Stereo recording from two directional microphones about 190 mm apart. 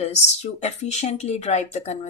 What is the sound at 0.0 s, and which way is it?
Speech, 35° left (ahead or behind).